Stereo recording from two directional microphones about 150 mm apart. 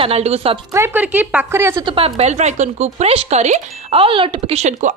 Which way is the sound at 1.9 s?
40° right (ahead or behind).